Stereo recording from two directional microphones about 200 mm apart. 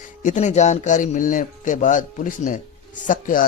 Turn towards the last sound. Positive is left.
turn(degrees=40)  # may be behind; listen again after turning